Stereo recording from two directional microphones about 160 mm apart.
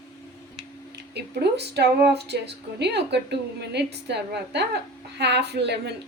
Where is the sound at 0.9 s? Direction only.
90° right.